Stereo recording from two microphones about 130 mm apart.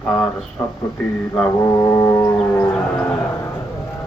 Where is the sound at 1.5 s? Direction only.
25° left (ahead or behind).